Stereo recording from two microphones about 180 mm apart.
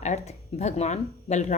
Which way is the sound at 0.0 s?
40° left (ahead or behind).